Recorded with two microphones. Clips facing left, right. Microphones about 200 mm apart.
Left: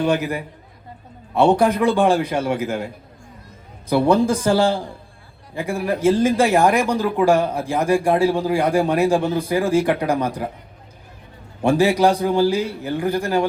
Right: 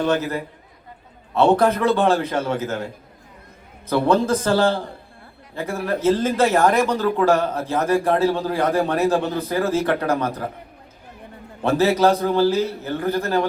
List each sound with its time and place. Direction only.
0.0 s a man's voice: 15° left (ahead or behind)
11.6 s a man's voice: 15° left (ahead or behind)